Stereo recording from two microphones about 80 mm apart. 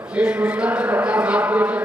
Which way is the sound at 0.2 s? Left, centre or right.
Centre.